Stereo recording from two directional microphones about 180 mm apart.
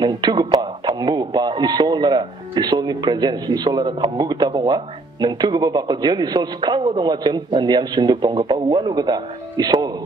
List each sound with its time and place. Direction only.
0.0 s speech: 25° right (ahead or behind)